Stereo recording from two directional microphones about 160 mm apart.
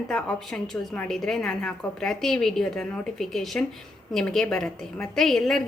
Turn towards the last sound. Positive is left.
turn(degrees=5)  # may be behind; listen again after turning